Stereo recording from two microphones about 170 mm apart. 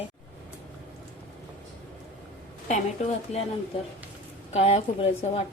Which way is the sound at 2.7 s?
40° left (ahead or behind).